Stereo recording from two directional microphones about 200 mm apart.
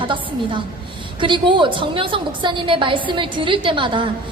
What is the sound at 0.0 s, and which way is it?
A woman's voice, 25° right (ahead or behind).